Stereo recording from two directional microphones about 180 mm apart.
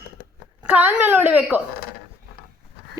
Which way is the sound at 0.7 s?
10° right (ahead or behind).